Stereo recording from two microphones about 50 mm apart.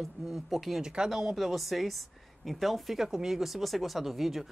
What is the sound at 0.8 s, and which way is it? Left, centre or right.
Speech, centre.